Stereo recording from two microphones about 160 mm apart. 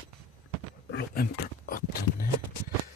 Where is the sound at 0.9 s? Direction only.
75° left (ahead or behind).